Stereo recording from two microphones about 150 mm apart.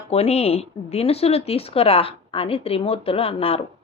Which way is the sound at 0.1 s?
45° left (ahead or behind).